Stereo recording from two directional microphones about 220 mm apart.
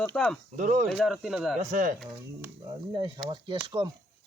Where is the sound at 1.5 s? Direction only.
35° right (ahead or behind).